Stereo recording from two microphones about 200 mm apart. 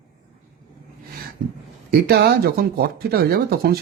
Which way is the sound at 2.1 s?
50° right (ahead or behind).